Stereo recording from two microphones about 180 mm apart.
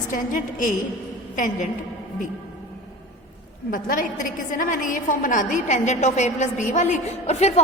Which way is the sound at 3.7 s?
50° left (ahead or behind).